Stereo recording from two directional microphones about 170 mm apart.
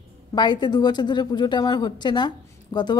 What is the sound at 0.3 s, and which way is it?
A woman's voice, 25° left (ahead or behind).